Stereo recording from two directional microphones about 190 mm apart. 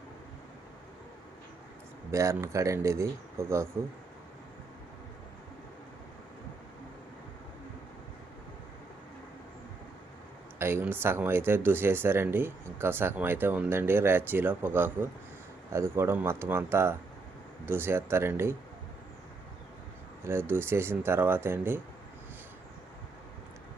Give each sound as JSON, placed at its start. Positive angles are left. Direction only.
{"t": 2.0, "sound": "speech", "side_deg": -15}
{"t": 10.6, "sound": "speech", "side_deg": -10}
{"t": 20.2, "sound": "speech", "side_deg": -10}